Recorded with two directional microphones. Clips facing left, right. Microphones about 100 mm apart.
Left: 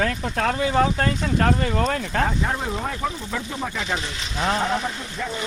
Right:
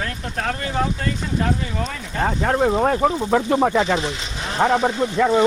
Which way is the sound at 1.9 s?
90° left.